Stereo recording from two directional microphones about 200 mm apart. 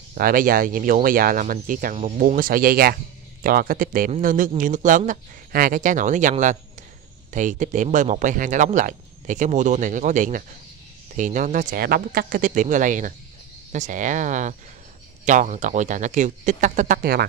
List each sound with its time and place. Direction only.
0.1 s speech: 45° right (ahead or behind)